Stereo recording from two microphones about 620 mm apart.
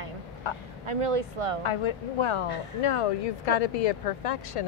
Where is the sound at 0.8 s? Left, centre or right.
Right.